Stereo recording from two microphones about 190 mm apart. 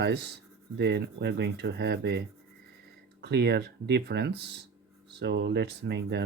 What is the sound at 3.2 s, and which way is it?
Speech, 60° right (ahead or behind).